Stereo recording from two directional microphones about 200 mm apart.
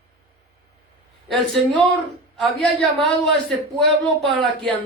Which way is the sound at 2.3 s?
5° left (ahead or behind).